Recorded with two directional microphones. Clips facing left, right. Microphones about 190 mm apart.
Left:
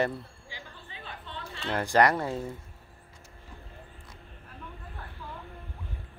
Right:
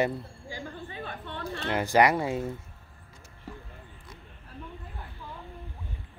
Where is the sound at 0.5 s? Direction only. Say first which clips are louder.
Right 9 dB; 50° right (ahead or behind).